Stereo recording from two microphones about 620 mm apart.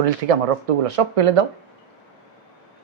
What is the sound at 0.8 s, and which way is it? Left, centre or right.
Speech, right.